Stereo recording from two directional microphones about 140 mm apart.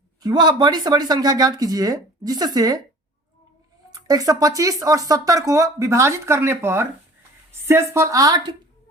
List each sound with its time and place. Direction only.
0.2 s speech: 30° right (ahead or behind)
3.9 s speech: 25° right (ahead or behind)